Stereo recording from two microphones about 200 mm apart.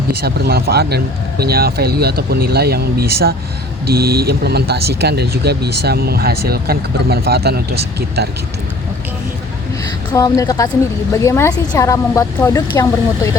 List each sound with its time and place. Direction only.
0.1 s speech: 50° right (ahead or behind)
10.1 s a woman's voice: 20° left (ahead or behind)